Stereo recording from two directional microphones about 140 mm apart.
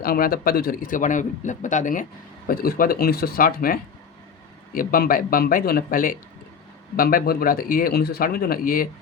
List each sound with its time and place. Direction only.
0.0 s a man's voice: 90° left; by 2.0 s 65° left (ahead or behind)
2.5 s speech: 90° left